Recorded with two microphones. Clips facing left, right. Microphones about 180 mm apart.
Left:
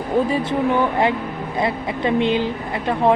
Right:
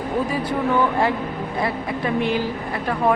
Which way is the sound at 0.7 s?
20° left (ahead or behind).